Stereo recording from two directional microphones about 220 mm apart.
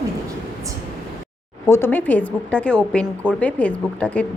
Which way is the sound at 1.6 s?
10° left (ahead or behind).